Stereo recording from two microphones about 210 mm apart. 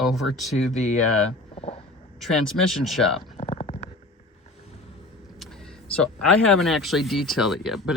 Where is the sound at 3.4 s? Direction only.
30° left (ahead or behind).